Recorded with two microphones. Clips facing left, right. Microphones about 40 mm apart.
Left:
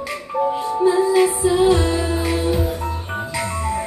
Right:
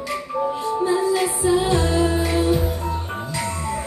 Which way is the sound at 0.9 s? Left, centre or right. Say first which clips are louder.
Left 5 dB; left.